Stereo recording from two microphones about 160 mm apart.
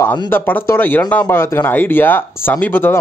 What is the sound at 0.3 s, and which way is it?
Speech, 10° left (ahead or behind).